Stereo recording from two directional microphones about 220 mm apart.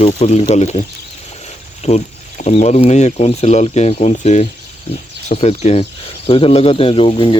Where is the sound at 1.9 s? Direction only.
35° left (ahead or behind).